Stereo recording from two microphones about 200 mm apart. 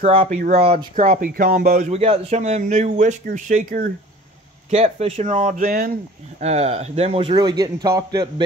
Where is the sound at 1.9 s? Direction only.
30° right (ahead or behind).